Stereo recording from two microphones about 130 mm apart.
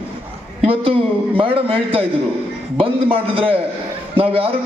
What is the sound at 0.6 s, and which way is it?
Speech, 45° right (ahead or behind).